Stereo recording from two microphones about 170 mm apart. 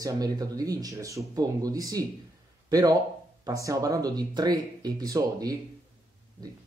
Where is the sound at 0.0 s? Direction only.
20° right (ahead or behind).